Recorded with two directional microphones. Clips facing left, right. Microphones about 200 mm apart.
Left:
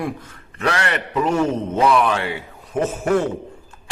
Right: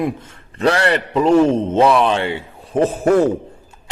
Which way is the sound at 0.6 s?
35° right (ahead or behind).